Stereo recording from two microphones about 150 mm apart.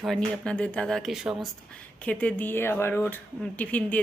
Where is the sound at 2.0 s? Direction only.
10° left (ahead or behind).